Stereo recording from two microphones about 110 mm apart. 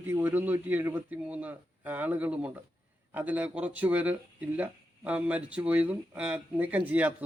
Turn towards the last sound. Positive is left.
turn(degrees=-15)  # may be behind; listen again after turning